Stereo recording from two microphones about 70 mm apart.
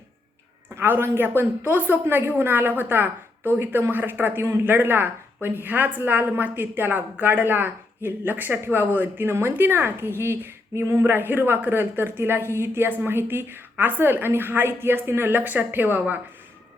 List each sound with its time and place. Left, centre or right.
0.8 s a woman's voice: right